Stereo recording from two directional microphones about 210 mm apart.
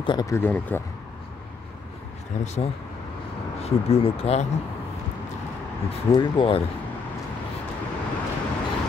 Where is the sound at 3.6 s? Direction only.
30° left (ahead or behind).